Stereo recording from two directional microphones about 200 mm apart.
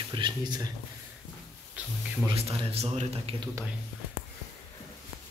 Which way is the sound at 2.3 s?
30° right (ahead or behind).